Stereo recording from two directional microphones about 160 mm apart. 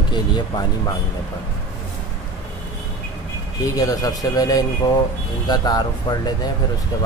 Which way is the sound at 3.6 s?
20° left (ahead or behind).